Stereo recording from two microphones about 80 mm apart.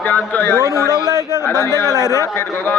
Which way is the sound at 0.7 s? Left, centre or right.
Left.